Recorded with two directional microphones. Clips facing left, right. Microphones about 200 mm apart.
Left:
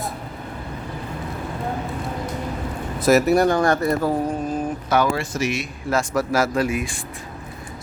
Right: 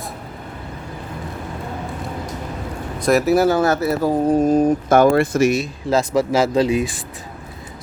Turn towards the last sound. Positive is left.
turn(degrees=-25)  # may be behind; listen again after turning